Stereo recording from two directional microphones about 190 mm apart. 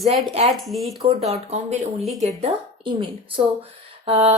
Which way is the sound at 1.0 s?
35° right (ahead or behind).